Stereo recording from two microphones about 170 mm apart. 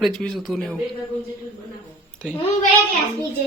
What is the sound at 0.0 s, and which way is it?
Speech, centre (ahead or behind).